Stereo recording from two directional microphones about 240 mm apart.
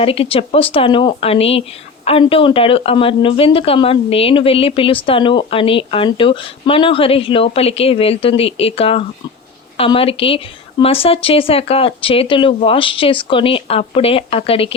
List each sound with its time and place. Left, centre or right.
0.0 s speech: left